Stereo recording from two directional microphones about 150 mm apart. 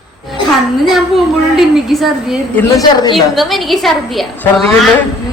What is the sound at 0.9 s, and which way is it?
A man's voice, centre (ahead or behind).